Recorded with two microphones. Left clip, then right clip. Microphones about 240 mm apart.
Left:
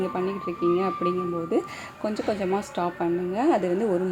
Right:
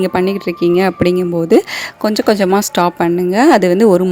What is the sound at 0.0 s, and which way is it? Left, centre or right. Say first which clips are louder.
Speech: right 13 dB; right.